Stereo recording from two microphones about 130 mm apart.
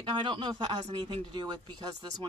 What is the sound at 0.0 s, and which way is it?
Speech, 40° right (ahead or behind).